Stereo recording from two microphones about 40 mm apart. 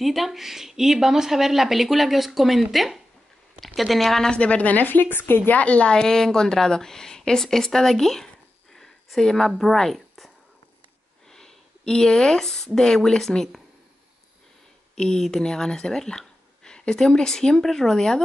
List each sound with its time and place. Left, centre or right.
0.0 s speech: centre
4.4 s a woman's voice: left
5.5 s speech: left
5.9 s a woman's voice: centre
8.7 s a sound: centre
9.6 s speech: centre
11.2 s a sound: centre
12.7 s a woman's voice: centre
15.3 s a woman's voice: centre